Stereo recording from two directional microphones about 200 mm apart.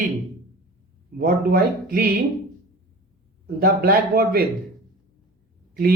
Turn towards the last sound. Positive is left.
turn(degrees=-50)  # may be behind; listen again after turning